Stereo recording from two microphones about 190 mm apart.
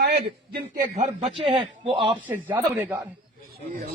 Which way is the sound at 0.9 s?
35° right (ahead or behind).